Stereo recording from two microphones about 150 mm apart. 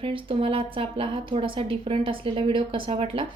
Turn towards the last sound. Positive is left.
turn(degrees=-35)  # may be behind; listen again after turning